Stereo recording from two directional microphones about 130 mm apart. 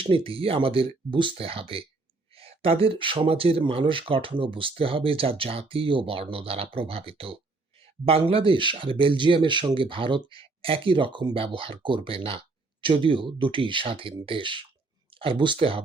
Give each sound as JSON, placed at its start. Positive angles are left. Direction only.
{"t": 0.3, "sound": "speech", "side_deg": -45}